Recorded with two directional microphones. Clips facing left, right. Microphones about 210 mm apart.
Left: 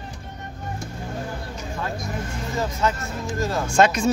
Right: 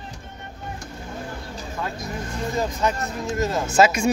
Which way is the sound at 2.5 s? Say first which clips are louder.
Even; 15° right (ahead or behind).